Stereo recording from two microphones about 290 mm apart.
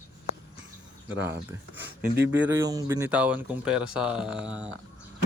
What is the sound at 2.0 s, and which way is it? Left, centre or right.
Speech, right.